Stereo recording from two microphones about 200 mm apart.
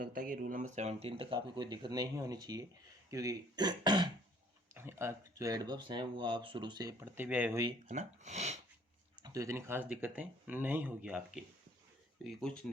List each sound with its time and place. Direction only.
0.0 s speech: 45° right (ahead or behind); by 7.6 s 10° right (ahead or behind)
7.9 s speech: 35° right (ahead or behind)
9.1 s speech: 20° right (ahead or behind)
12.2 s speech: centre (ahead or behind)